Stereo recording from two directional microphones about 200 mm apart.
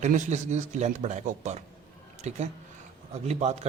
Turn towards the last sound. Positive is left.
turn(degrees=-35)  # may be behind; listen again after turning